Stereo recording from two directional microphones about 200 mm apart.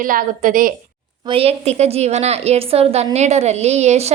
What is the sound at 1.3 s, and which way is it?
A woman's voice, 30° right (ahead or behind).